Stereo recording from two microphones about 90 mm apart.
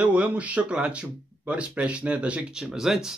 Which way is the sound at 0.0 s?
10° right (ahead or behind).